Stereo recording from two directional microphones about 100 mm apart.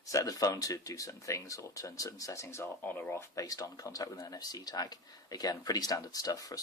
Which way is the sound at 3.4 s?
35° left (ahead or behind).